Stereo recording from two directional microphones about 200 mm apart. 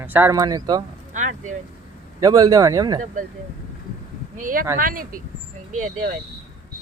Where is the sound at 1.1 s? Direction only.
40° right (ahead or behind).